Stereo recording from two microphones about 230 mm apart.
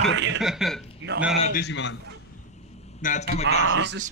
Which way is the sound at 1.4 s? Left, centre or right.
Left.